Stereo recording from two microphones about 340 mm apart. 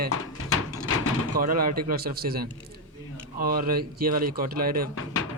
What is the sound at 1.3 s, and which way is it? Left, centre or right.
Speech, right.